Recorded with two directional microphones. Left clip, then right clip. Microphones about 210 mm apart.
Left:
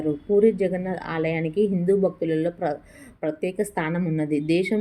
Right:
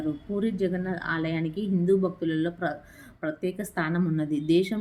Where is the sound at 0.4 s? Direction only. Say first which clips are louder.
Left 8 dB; 10° left (ahead or behind).